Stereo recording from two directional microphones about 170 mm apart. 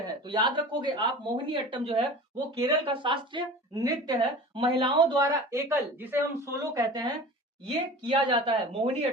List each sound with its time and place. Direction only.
0.3 s speech: 25° right (ahead or behind)